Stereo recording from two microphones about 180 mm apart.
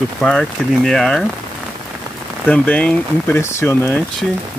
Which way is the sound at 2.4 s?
5° left (ahead or behind).